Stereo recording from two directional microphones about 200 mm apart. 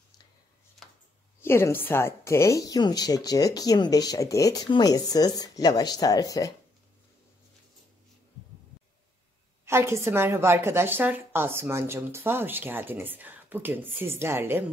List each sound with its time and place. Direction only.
0.8 s a sound: centre (ahead or behind)
1.4 s speech: 10° left (ahead or behind)
9.7 s a woman's voice: 15° right (ahead or behind)